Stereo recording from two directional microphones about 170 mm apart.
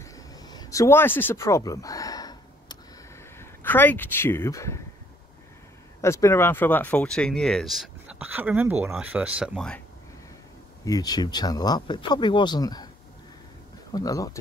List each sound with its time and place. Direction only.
0.0 s a sound: 20° left (ahead or behind)
3.3 s speech: 10° left (ahead or behind)
5.9 s speech: 15° left (ahead or behind); by 9.6 s 10° right (ahead or behind)
10.9 s speech: 25° left (ahead or behind)
13.9 s speech: 20° left (ahead or behind)